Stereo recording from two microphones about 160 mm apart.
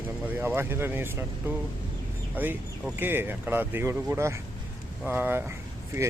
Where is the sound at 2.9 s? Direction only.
15° right (ahead or behind).